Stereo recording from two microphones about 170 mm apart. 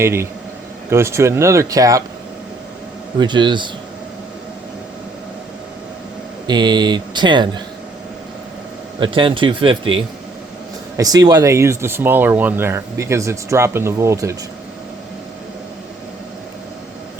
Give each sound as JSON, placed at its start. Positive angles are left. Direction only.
{"t": 0.0, "sound": "speech", "side_deg": -15}
{"t": 3.2, "sound": "speech", "side_deg": -25}
{"t": 6.5, "sound": "speech", "side_deg": -25}
{"t": 9.0, "sound": "speech", "side_deg": -30}
{"t": 10.9, "sound": "speech", "side_deg": -20}